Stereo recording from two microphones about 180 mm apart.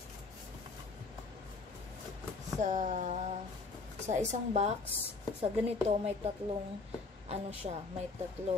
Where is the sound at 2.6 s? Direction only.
40° right (ahead or behind).